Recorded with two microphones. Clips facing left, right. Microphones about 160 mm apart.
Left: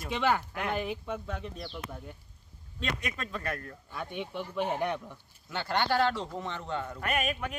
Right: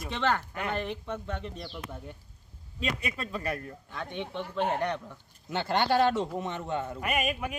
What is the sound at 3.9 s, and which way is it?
Speech, 10° left (ahead or behind).